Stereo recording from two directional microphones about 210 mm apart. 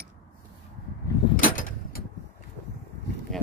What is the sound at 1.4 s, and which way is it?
Door, 40° left (ahead or behind).